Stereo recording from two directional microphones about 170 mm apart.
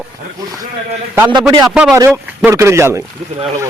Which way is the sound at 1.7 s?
5° right (ahead or behind).